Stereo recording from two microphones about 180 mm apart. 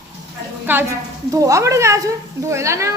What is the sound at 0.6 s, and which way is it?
A woman's voice, 10° right (ahead or behind).